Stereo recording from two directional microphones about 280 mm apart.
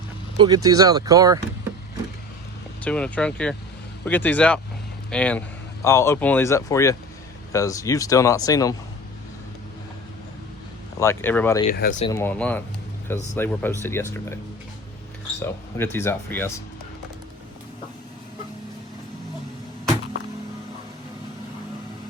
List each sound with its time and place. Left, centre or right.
0.3 s speech: centre
2.8 s speech: centre
11.0 s speech: centre
11.7 s speech: left
12.0 s speech: centre
15.4 s speech: centre